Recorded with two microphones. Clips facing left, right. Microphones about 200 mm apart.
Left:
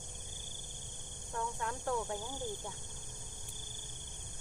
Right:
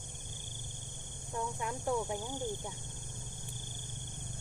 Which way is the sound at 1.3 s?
15° right (ahead or behind).